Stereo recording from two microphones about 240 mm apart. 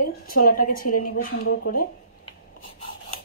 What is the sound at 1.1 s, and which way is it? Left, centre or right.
Speech, left.